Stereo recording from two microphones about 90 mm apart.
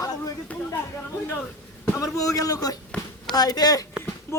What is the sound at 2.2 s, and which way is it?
Speech, 40° left (ahead or behind).